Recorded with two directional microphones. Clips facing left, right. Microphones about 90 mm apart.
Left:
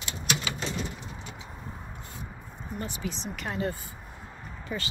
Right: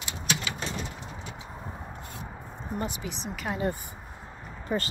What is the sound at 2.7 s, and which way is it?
Speech, 20° right (ahead or behind).